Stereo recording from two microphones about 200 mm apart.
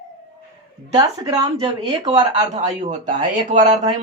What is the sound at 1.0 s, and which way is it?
Speech, 20° right (ahead or behind).